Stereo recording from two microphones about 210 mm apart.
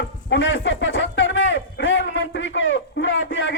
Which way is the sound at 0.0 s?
60° left (ahead or behind).